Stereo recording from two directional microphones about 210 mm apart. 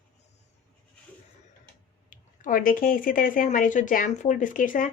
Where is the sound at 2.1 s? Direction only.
40° left (ahead or behind).